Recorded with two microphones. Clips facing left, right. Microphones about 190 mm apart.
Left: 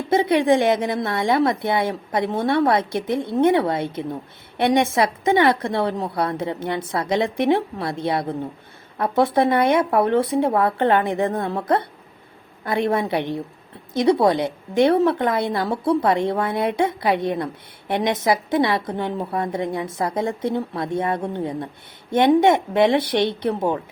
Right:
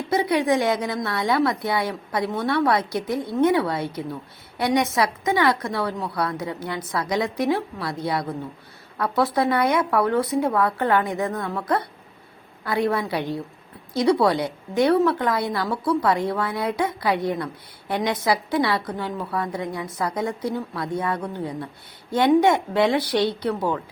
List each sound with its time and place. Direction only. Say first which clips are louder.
0.1 s a woman's voice: left 4 dB; 25° left (ahead or behind)